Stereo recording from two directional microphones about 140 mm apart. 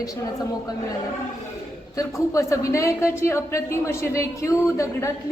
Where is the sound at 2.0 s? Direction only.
20° left (ahead or behind).